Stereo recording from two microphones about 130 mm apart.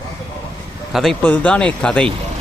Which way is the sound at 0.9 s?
Centre (ahead or behind).